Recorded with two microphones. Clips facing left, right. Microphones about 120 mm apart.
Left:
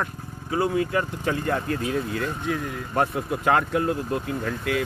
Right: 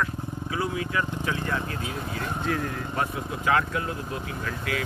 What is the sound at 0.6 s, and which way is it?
Speech, 45° left (ahead or behind).